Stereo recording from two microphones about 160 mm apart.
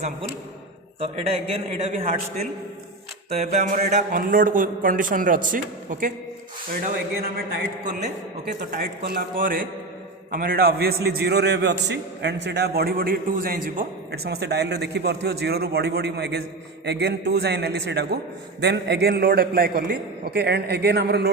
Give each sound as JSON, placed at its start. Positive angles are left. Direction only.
{"t": 1.8, "sound": "a man's voice", "side_deg": -45}
{"t": 6.8, "sound": "speech", "side_deg": -70}
{"t": 8.7, "sound": "a man's voice", "side_deg": -60}